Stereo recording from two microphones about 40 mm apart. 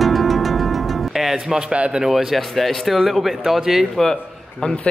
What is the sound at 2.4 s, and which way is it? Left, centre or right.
A man's voice, centre.